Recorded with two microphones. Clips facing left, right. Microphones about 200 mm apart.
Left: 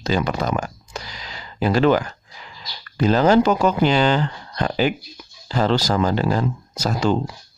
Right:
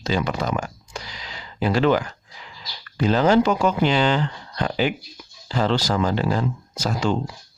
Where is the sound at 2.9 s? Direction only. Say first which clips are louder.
Left 2 dB; 40° left (ahead or behind).